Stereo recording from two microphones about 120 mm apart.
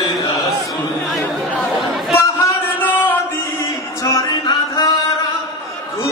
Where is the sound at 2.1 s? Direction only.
20° left (ahead or behind).